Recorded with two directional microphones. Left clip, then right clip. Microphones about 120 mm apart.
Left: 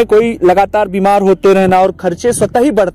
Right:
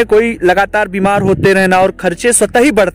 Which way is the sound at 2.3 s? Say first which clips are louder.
Right 3 dB; 30° right (ahead or behind).